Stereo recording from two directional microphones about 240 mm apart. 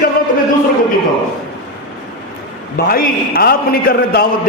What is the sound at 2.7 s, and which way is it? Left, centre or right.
A man's voice, left.